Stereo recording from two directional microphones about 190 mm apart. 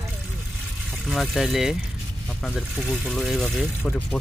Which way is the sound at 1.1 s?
Centre (ahead or behind).